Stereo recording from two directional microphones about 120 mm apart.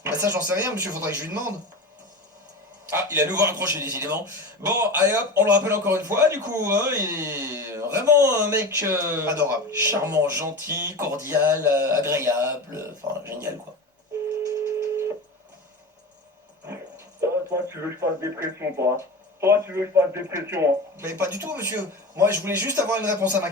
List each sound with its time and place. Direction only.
0.0 s a man's voice: 20° right (ahead or behind)
2.9 s a man's voice: 20° right (ahead or behind)
14.4 s a sound: 25° right (ahead or behind)
17.2 s a man's voice: 20° right (ahead or behind)